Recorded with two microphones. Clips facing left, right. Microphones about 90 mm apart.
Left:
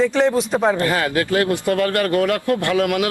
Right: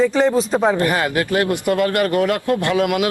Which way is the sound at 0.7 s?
25° right (ahead or behind).